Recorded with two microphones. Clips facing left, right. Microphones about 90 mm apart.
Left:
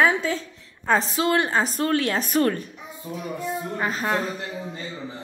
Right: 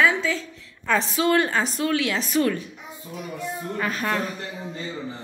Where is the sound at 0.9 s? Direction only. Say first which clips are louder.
Even; 35° left (ahead or behind).